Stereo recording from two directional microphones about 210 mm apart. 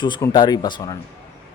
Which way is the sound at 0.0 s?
20° left (ahead or behind).